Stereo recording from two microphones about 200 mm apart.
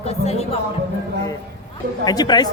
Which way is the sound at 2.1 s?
20° left (ahead or behind).